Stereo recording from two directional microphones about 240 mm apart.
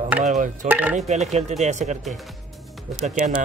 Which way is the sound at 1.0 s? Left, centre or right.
Right.